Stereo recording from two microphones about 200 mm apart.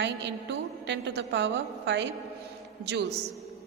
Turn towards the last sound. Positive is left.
turn(degrees=-55)  # may be behind; listen again after turning